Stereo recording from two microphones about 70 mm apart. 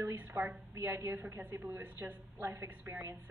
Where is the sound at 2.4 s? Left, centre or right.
Right.